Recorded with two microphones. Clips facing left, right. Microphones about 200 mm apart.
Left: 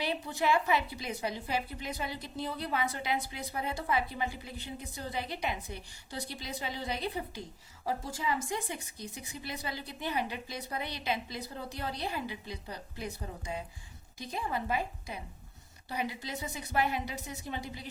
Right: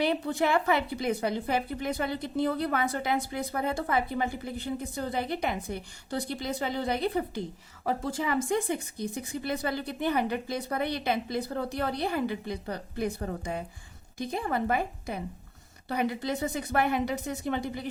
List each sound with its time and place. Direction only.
0.0 s a woman's voice: 55° right (ahead or behind)